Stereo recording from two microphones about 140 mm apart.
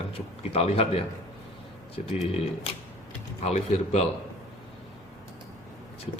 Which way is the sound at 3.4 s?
50° left (ahead or behind).